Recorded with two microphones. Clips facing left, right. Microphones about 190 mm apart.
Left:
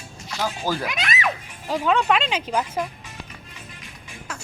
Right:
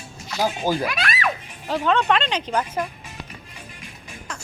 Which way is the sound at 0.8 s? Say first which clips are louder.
Right 1 dB; 20° left (ahead or behind).